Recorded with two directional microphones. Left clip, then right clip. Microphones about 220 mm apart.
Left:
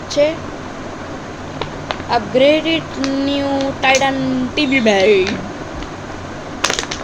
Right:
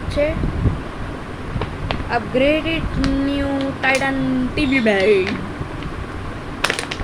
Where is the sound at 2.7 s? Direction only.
5° left (ahead or behind).